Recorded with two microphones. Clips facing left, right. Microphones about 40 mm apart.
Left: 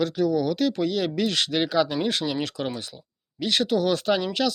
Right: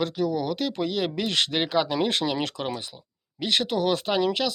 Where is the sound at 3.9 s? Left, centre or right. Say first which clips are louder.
Even; centre.